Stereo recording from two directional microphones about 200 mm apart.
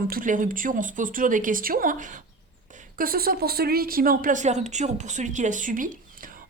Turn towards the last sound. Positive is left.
turn(degrees=-40)  # may be behind; listen again after turning